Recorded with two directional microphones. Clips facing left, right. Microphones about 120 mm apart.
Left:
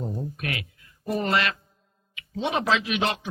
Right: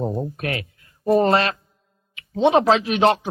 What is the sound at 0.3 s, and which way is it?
A man's voice, 40° right (ahead or behind).